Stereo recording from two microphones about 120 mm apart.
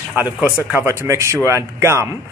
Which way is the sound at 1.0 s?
25° right (ahead or behind).